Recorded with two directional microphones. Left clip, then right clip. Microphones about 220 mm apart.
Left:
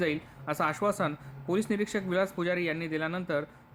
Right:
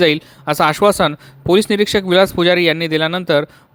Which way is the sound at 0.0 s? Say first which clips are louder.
Right 17 dB; 40° right (ahead or behind).